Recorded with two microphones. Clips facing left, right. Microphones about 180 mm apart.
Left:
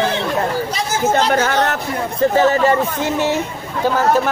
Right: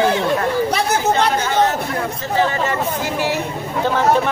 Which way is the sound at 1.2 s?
60° left (ahead or behind).